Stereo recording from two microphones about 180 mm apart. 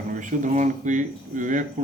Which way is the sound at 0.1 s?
45° right (ahead or behind).